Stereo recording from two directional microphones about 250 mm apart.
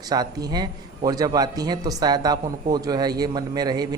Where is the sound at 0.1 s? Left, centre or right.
Centre.